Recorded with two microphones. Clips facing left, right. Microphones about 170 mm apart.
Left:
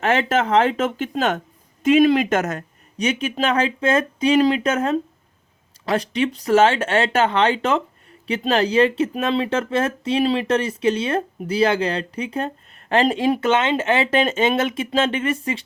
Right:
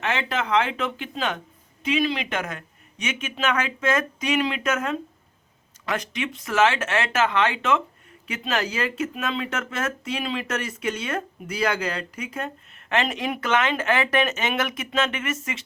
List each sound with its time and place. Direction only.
0.0 s speech: 45° left (ahead or behind)